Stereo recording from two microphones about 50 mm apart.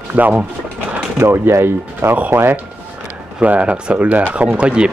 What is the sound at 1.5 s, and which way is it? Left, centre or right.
Speech, right.